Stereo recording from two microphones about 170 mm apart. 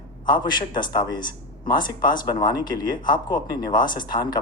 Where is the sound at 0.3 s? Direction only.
25° left (ahead or behind).